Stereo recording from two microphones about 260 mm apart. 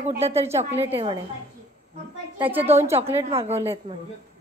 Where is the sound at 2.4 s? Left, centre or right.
Centre.